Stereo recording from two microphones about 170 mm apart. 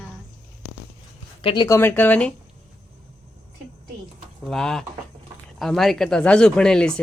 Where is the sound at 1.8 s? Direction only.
10° left (ahead or behind).